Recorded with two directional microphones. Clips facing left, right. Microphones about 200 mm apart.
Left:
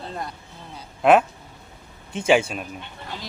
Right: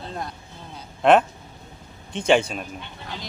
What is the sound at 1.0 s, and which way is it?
Speech, 5° left (ahead or behind).